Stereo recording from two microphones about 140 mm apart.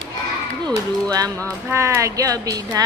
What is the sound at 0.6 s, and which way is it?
Music, 25° right (ahead or behind).